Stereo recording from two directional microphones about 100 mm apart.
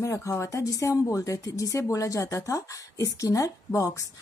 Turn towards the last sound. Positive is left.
turn(degrees=30)  # may be behind; listen again after turning